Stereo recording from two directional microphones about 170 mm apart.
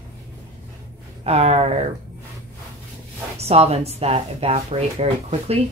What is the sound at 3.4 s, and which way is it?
Speech, 40° right (ahead or behind).